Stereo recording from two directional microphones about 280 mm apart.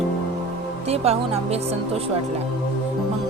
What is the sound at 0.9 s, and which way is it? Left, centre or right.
Speech, right.